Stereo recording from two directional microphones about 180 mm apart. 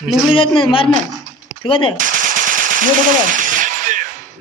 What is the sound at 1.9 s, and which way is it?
Machine gun, 45° right (ahead or behind).